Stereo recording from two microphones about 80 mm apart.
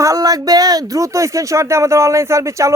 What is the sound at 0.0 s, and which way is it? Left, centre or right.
Speech, right.